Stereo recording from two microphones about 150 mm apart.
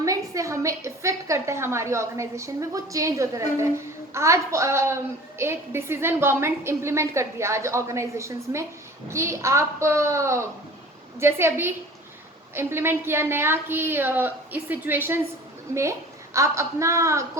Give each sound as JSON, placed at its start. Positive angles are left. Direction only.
{"t": 0.0, "sound": "a woman's voice", "side_deg": -20}